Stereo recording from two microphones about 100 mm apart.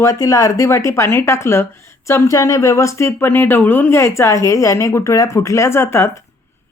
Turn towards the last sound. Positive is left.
turn(degrees=25)  # may be behind; listen again after turning